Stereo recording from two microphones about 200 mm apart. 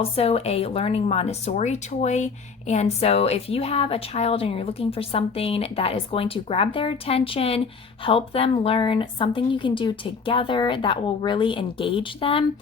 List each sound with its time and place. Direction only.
0.0 s speech: 30° left (ahead or behind)